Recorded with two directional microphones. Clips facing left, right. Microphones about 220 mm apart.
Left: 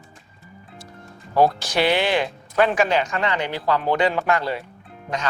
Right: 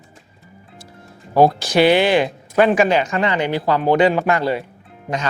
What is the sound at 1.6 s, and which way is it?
Speech, 5° right (ahead or behind).